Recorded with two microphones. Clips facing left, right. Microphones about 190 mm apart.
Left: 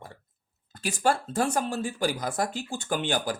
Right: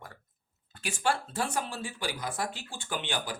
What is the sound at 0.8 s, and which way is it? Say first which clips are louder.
Speech: left 5 dB; 40° left (ahead or behind).